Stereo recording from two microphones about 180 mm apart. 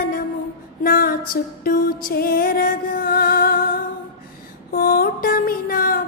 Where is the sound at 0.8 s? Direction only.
55° left (ahead or behind).